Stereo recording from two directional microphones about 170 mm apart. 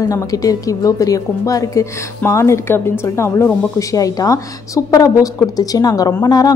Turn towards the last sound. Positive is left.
turn(degrees=20)  # may be behind; listen again after turning